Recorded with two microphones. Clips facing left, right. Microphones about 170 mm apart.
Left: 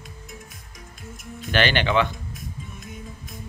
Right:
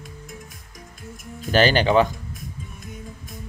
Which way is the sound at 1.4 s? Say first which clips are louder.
Right 4 dB; 40° right (ahead or behind).